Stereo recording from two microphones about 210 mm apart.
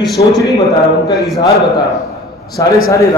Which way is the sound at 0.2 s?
35° left (ahead or behind).